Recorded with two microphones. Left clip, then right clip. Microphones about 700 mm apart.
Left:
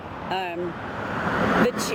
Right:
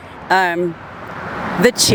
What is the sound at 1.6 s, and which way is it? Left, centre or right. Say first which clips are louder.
Speech: right 11 dB; right.